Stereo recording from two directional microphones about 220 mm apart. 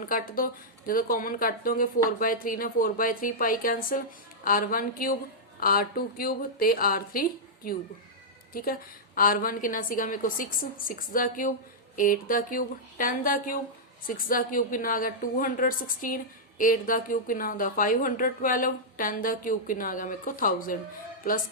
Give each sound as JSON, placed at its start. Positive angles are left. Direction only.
{"t": 0.0, "sound": "a woman's voice", "side_deg": 40}